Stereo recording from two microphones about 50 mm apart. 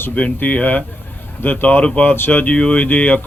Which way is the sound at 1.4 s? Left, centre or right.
Left.